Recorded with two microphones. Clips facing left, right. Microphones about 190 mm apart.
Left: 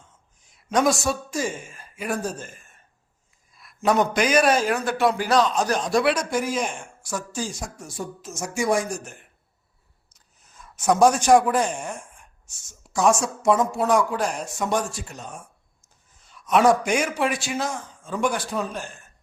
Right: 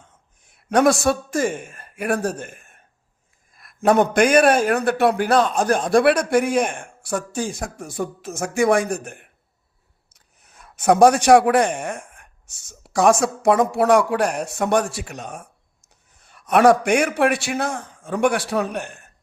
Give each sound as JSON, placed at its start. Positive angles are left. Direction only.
{"t": 0.4, "sound": "a man's voice", "side_deg": -60}